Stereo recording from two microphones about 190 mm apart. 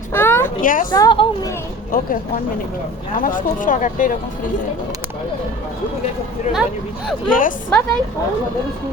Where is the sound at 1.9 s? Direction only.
50° left (ahead or behind).